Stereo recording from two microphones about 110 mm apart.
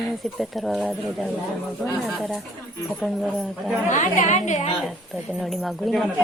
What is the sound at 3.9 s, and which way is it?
Speech, 90° left.